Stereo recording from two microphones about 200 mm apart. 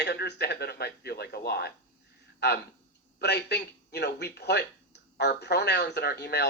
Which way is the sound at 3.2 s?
55° left (ahead or behind).